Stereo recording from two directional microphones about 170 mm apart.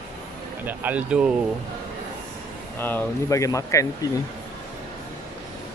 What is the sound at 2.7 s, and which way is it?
Speech, 10° left (ahead or behind).